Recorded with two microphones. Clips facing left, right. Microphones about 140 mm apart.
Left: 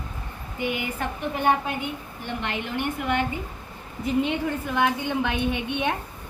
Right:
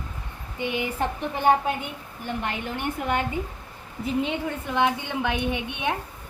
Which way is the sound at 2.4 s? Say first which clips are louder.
Left 2 dB; 40° right (ahead or behind).